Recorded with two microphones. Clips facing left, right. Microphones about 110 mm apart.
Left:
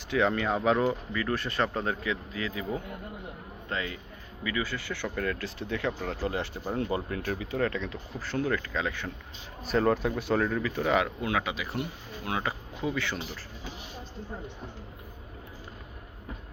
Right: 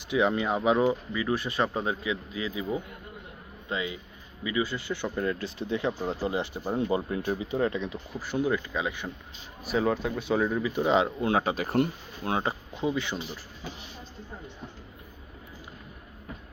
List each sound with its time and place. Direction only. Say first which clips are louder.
0.1 s speech: right 1 dB; 15° right (ahead or behind)
9.6 s speech: left 1 dB; 5° right (ahead or behind)
10.4 s speech: right 2 dB; 15° right (ahead or behind); by 11.9 s 50° right (ahead or behind)
12.2 s speech: right 3 dB; 30° right (ahead or behind)